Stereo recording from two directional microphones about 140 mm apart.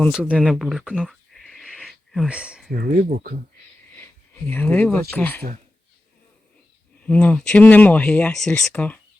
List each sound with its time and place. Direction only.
0.1 s speech: 10° right (ahead or behind)
0.3 s a sound: centre (ahead or behind)
2.7 s speech: 75° right (ahead or behind)
3.9 s a sound: 15° left (ahead or behind)
5.1 s speech: 15° left (ahead or behind)
7.0 s speech: 10° left (ahead or behind)